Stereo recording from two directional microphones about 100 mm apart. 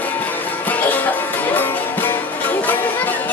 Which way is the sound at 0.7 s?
15° left (ahead or behind).